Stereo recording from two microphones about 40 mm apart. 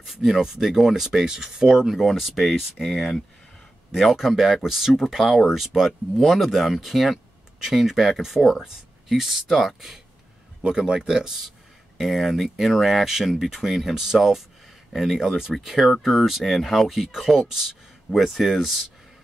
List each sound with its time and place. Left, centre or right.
0.1 s speech: centre
3.9 s speech: centre
10.6 s speech: centre
12.0 s speech: centre
16.0 s speech: centre